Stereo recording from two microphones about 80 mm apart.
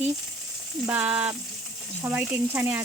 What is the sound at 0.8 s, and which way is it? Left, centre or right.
Speech, right.